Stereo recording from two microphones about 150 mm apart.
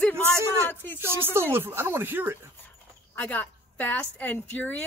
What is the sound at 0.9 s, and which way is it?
Speech, 15° right (ahead or behind).